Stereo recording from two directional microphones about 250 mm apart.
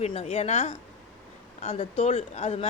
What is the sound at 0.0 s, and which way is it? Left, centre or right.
A woman's voice, left.